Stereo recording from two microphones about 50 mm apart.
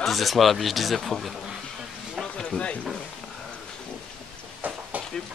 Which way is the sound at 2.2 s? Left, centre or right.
Centre.